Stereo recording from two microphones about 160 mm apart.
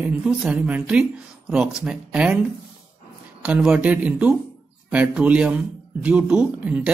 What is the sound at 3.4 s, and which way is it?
Speech, 5° right (ahead or behind).